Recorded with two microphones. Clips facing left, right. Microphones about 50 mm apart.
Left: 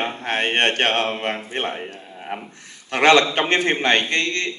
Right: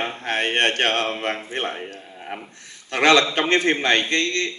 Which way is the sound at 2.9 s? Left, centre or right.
Left.